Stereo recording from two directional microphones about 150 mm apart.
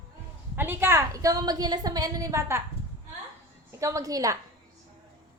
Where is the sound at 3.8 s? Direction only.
20° right (ahead or behind).